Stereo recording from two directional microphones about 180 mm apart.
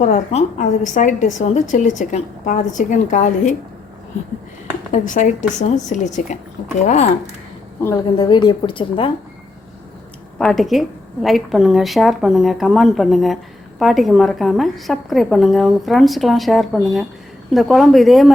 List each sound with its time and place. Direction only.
0.0 s a woman's voice: 40° left (ahead or behind)
4.9 s a woman's voice: 45° left (ahead or behind)
7.8 s a woman's voice: 15° left (ahead or behind)
10.3 s a woman's voice: 5° left (ahead or behind)